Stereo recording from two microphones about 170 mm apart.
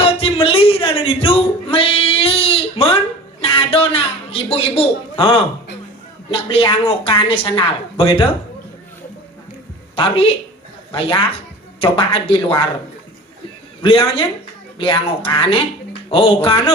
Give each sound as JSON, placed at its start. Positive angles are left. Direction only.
{"t": 0.0, "sound": "a sound", "side_deg": 35}
{"t": 6.3, "sound": "speech", "side_deg": 30}
{"t": 9.9, "sound": "a woman's voice", "side_deg": 35}
{"t": 11.8, "sound": "speech", "side_deg": 30}
{"t": 13.8, "sound": "speech", "side_deg": 30}